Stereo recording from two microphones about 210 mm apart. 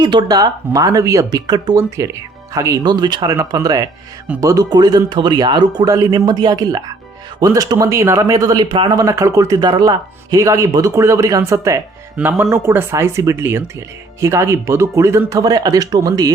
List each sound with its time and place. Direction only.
0.0 s speech: 20° right (ahead or behind)